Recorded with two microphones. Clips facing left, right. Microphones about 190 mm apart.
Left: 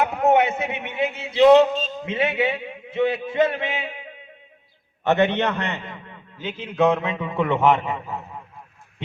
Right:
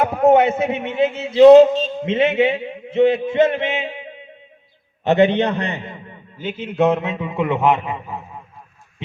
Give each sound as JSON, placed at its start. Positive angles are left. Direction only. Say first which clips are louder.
{"t": 0.0, "sound": "a man's voice", "louder": "right 5 dB", "side_deg": -30}
{"t": 1.4, "sound": "a sound", "louder": "right 6 dB", "side_deg": -30}
{"t": 2.0, "sound": "a man's voice", "louder": "right 6 dB", "side_deg": -25}
{"t": 7.9, "sound": "a man's voice", "louder": "right 1 dB", "side_deg": -10}